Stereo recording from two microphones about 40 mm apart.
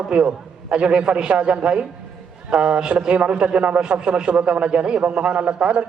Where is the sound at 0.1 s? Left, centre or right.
Right.